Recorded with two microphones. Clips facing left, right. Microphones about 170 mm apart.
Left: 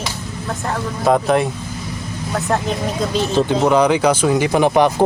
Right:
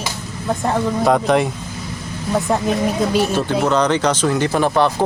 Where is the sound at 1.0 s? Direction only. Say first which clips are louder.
Left 2 dB; centre (ahead or behind).